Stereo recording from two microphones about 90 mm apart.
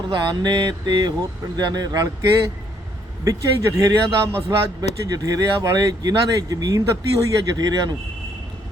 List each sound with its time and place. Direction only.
0.1 s a sound: 55° right (ahead or behind)
1.5 s speech: 50° right (ahead or behind)
3.2 s a man's voice: 35° right (ahead or behind)